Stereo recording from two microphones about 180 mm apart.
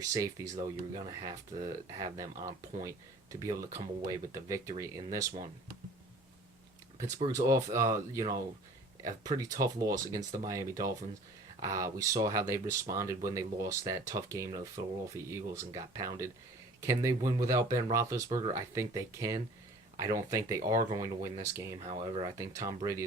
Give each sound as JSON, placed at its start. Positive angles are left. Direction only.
{"t": 0.0, "sound": "speech", "side_deg": -20}
{"t": 3.4, "sound": "speech", "side_deg": -15}
{"t": 7.3, "sound": "speech", "side_deg": -20}
{"t": 21.8, "sound": "speech", "side_deg": -30}